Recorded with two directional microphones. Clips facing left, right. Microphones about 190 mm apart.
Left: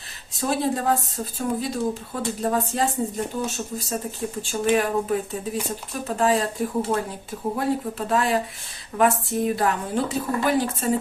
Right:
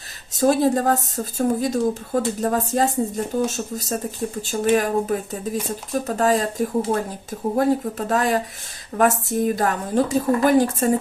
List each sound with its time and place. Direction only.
0.3 s a woman's voice: 45° right (ahead or behind)